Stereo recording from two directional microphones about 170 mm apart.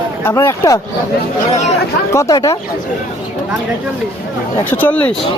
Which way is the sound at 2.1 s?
20° left (ahead or behind).